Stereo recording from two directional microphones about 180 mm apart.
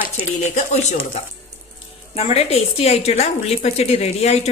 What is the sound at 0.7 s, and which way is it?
Speech, 40° left (ahead or behind).